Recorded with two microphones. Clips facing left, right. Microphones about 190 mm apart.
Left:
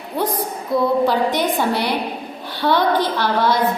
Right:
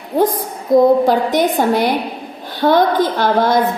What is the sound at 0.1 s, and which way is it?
A woman's voice, 40° right (ahead or behind).